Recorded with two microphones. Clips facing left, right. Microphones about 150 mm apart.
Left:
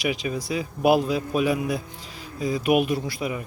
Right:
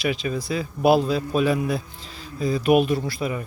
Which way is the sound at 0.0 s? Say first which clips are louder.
Right 1 dB; 15° left (ahead or behind).